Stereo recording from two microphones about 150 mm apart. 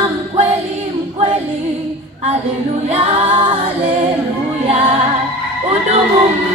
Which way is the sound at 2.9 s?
35° right (ahead or behind).